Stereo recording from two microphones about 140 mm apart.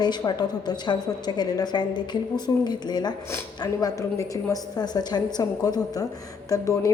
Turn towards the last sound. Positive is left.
turn(degrees=20)  # may be behind; listen again after turning